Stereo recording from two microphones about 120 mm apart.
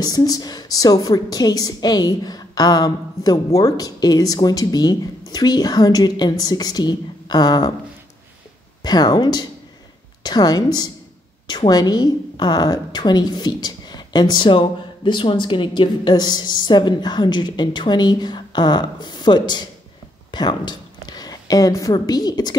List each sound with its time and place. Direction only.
0.0 s a woman's voice: 30° left (ahead or behind)
8.8 s a woman's voice: 35° left (ahead or behind)